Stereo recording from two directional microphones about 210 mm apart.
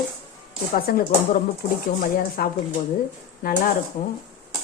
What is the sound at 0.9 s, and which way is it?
A woman's voice, 45° left (ahead or behind).